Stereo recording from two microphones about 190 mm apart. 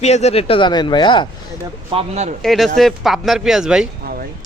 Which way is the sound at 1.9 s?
30° right (ahead or behind).